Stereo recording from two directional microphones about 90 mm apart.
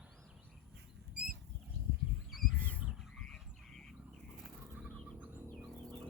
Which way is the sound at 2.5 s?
15° left (ahead or behind).